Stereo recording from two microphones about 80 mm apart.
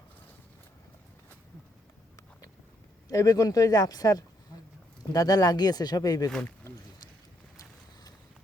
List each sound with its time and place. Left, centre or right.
3.1 s speech: left